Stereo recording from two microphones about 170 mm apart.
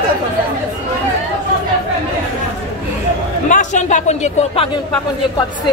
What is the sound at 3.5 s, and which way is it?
Speech, 45° left (ahead or behind).